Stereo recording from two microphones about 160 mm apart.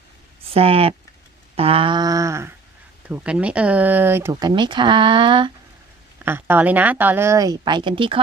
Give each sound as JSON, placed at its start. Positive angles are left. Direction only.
{"t": 0.5, "sound": "speech", "side_deg": -35}
{"t": 1.5, "sound": "a sound", "side_deg": -35}
{"t": 3.1, "sound": "speech", "side_deg": -5}
{"t": 6.2, "sound": "a woman's voice", "side_deg": -15}